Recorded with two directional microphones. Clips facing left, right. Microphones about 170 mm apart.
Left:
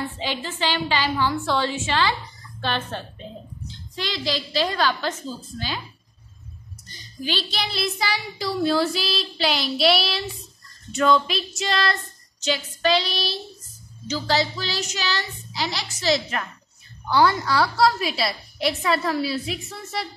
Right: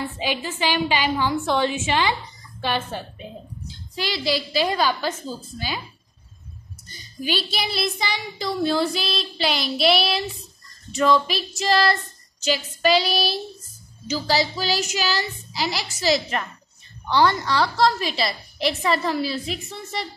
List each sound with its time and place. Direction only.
0.2 s a woman's voice: 15° right (ahead or behind)
6.9 s a sound: 10° right (ahead or behind)
7.5 s a woman's voice: centre (ahead or behind)